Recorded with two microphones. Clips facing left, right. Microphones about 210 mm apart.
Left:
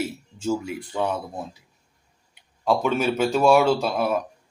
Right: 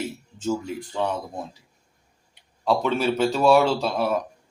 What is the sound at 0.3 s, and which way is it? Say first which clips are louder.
Speech: left 1 dB; 10° left (ahead or behind).